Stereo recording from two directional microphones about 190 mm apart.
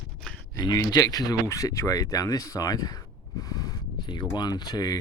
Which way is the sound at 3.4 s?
20° left (ahead or behind).